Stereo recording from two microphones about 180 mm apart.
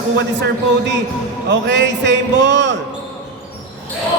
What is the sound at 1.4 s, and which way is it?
A man's voice, 75° right (ahead or behind).